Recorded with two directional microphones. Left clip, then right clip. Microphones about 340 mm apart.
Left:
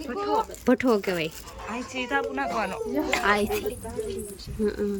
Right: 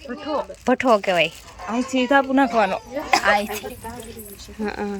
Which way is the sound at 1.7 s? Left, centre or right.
Centre.